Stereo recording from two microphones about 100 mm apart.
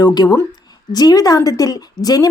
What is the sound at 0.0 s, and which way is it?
Speech, 40° left (ahead or behind).